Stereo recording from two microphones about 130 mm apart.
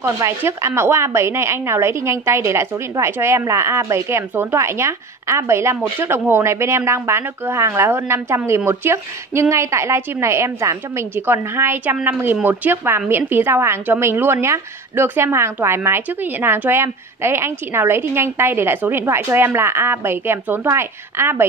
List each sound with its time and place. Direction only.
0.0 s a woman's voice: 20° right (ahead or behind)